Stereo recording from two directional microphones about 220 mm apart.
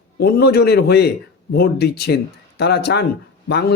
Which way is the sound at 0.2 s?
45° left (ahead or behind).